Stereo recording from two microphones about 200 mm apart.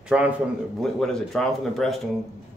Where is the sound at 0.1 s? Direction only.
5° right (ahead or behind).